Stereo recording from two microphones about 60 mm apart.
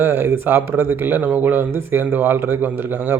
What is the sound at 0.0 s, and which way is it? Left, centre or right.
A man's voice, right.